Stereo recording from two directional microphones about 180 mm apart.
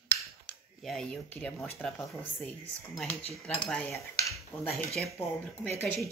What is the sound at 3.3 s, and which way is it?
Speech, 5° left (ahead or behind).